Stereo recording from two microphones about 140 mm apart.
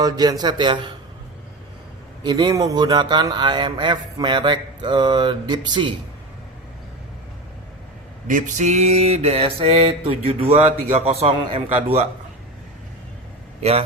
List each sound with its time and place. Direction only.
0.0 s speech: 30° right (ahead or behind)
2.2 s speech: 30° right (ahead or behind)
8.3 s mantra: 60° right (ahead or behind); by 12.0 s 45° right (ahead or behind)
13.6 s mantra: 50° right (ahead or behind)